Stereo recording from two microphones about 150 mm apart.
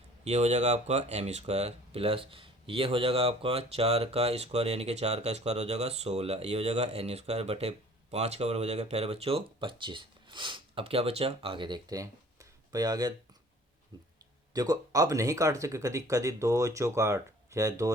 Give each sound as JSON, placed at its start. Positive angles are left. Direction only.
{"t": 0.3, "sound": "speech", "side_deg": -50}
{"t": 14.5, "sound": "speech", "side_deg": -25}